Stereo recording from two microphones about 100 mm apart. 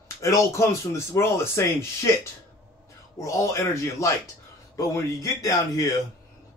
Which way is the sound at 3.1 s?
35° left (ahead or behind).